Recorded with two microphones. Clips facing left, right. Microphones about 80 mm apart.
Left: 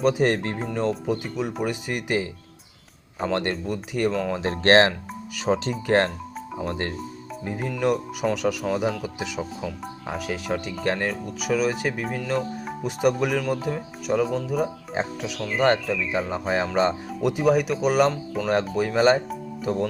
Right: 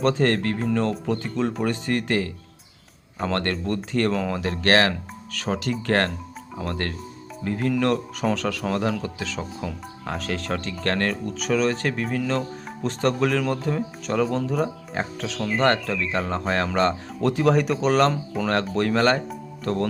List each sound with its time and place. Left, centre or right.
0.0 s speech: centre
3.3 s speech: centre
4.4 s speech: left
5.5 s speech: centre
5.9 s speech: centre
15.0 s speech: left